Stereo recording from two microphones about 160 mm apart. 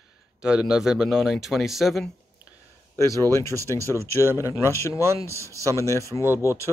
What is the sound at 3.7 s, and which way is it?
Speech, 20° right (ahead or behind).